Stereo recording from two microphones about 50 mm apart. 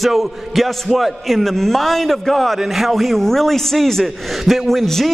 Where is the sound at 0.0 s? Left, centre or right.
Centre.